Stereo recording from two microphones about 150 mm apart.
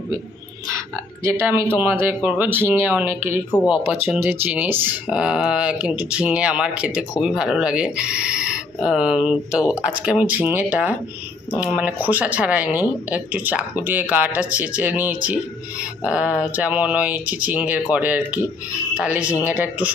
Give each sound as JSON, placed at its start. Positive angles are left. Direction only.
{"t": 1.2, "sound": "speech", "side_deg": -20}